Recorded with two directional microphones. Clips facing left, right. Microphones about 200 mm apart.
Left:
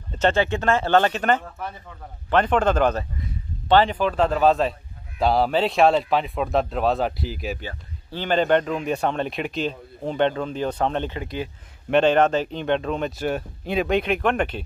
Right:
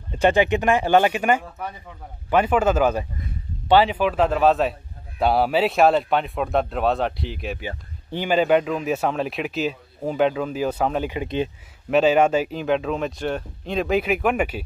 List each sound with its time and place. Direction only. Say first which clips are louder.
0.1 s a man's voice: right 3 dB; 15° right (ahead or behind)
7.6 s a man's voice: right 3 dB; 15° right (ahead or behind)
11.2 s speech: right 5 dB; 20° right (ahead or behind)
11.9 s a man's voice: right 1 dB; 5° right (ahead or behind)